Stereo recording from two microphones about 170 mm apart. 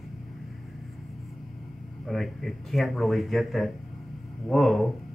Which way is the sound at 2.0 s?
Centre (ahead or behind).